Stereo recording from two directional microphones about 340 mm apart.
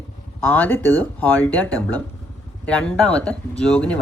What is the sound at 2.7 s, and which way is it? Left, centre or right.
Speech, centre.